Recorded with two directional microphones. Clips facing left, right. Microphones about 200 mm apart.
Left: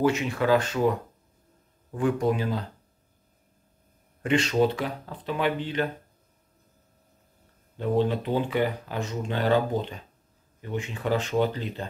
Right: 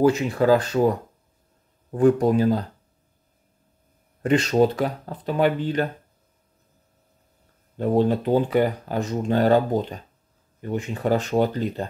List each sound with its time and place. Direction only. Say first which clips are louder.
0.0 s speech: right 5 dB; 35° right (ahead or behind)
4.2 s speech: right 4 dB; 40° right (ahead or behind)
7.7 s speech: right 4 dB; 45° right (ahead or behind)